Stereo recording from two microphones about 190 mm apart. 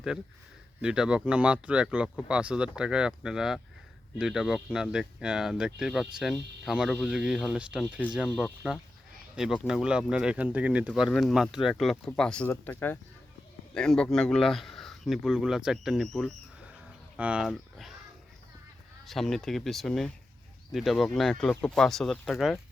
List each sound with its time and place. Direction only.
0.8 s speech: 5° right (ahead or behind)
19.0 s speech: centre (ahead or behind)